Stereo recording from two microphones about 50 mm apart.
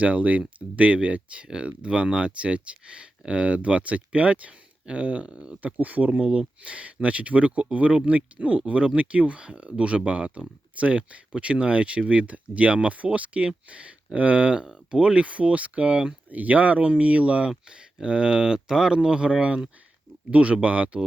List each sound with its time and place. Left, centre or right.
0.0 s speech: right